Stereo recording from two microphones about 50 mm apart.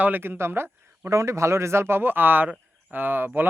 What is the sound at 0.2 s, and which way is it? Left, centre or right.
Speech, right.